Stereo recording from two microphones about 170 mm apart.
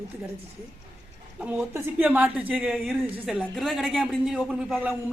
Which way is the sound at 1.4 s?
10° right (ahead or behind).